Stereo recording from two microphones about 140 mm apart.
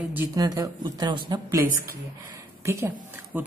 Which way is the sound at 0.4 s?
25° right (ahead or behind).